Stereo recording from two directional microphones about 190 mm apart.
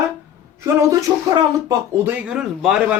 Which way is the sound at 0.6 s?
15° right (ahead or behind).